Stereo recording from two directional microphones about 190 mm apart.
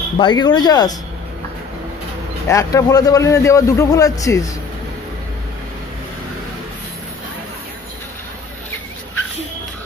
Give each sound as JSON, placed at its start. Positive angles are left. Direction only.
{"t": 0.2, "sound": "speech", "side_deg": 25}
{"t": 2.4, "sound": "a man's voice", "side_deg": 15}